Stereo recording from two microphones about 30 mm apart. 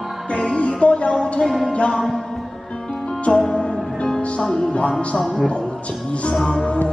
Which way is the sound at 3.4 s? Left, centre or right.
Left.